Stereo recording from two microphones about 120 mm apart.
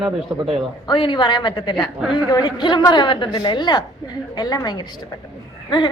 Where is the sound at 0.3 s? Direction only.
30° right (ahead or behind).